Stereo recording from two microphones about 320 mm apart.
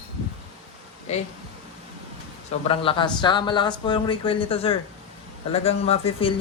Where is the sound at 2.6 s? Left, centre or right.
Centre.